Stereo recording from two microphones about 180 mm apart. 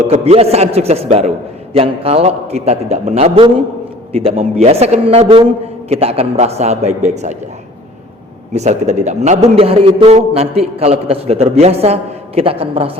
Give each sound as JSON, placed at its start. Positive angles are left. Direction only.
{"t": 0.0, "sound": "a man's voice", "side_deg": -40}
{"t": 8.5, "sound": "a man's voice", "side_deg": -40}